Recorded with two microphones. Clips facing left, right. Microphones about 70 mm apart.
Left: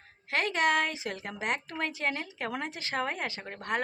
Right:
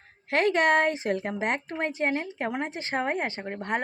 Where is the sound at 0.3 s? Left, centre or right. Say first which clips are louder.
Right 5 dB; right.